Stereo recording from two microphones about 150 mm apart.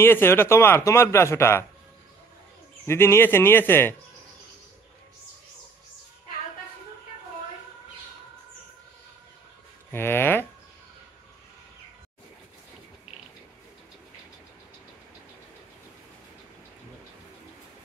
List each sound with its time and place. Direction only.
0.0 s a man's voice: 15° left (ahead or behind)
2.9 s a man's voice: 15° left (ahead or behind)
9.8 s a man's voice: 15° left (ahead or behind)